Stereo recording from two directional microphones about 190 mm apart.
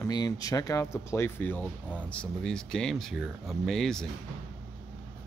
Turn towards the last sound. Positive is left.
turn(degrees=0)  # may be behind; listen again after turning